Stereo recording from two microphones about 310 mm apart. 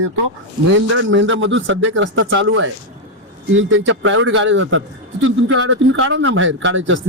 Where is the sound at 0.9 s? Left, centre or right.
Right.